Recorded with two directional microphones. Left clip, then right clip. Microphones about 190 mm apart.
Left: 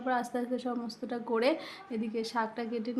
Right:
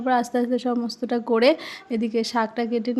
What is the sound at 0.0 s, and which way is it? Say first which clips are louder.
A woman's voice: right 10 dB; 40° right (ahead or behind).